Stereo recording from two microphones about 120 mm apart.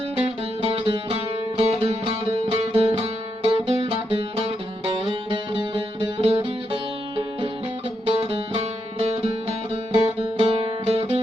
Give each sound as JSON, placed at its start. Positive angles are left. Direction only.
{"t": 0.3, "sound": "music", "side_deg": -55}
{"t": 8.0, "sound": "music", "side_deg": -55}